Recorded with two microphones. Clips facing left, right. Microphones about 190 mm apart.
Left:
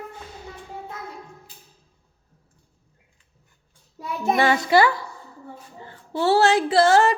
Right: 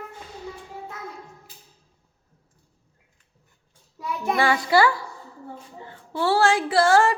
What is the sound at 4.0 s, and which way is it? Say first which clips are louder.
Speech: left 2 dB; 25° left (ahead or behind).